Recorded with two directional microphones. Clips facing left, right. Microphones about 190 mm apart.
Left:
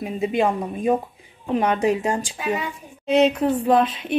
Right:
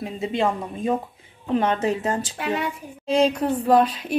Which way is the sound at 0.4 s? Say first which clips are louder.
Left 1 dB; 15° left (ahead or behind).